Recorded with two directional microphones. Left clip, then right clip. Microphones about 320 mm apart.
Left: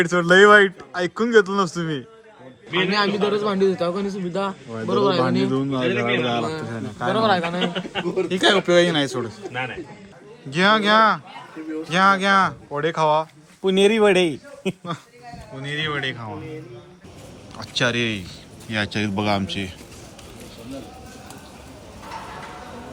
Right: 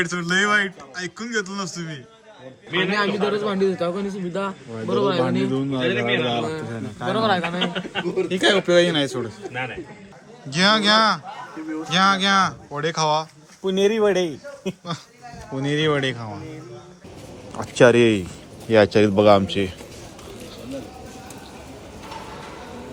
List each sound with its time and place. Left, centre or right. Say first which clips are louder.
0.0 s a man's voice: left 7 dB; centre
13.7 s speech: left 3 dB; left
15.5 s speech: right 5 dB; centre
18.7 s a man's voice: right 9 dB; centre